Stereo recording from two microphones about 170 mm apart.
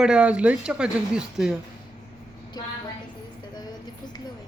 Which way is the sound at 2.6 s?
25° left (ahead or behind).